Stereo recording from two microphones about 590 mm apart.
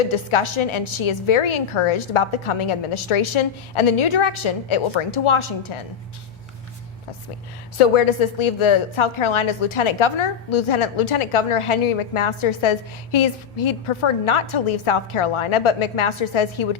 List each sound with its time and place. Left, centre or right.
0.0 s a woman's voice: left
7.8 s a woman's voice: left